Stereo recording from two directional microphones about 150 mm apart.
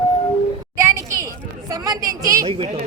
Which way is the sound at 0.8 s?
20° right (ahead or behind).